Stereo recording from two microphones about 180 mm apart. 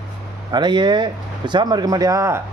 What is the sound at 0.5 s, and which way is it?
Speech, 25° right (ahead or behind).